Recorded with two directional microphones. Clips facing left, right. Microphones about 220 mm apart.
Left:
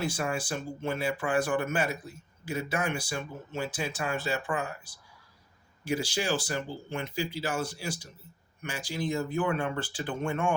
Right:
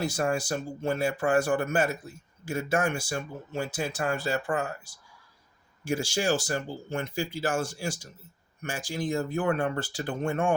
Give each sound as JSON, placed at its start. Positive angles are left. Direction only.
{"t": 0.0, "sound": "speech", "side_deg": -40}
{"t": 5.8, "sound": "speech", "side_deg": -45}